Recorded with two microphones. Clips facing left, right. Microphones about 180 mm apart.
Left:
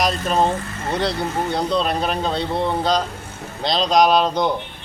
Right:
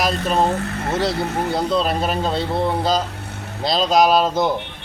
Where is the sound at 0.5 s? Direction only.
65° right (ahead or behind).